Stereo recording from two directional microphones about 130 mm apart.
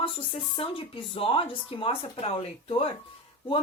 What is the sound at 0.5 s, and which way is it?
Speech, 40° left (ahead or behind).